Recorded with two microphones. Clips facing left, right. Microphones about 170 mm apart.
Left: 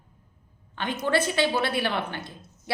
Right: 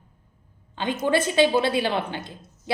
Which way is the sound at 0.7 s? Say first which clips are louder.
Right 3 dB; 20° right (ahead or behind).